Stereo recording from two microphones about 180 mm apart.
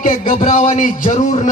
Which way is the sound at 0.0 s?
50° left (ahead or behind).